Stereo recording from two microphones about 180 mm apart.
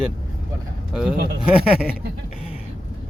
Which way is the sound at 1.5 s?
5° right (ahead or behind).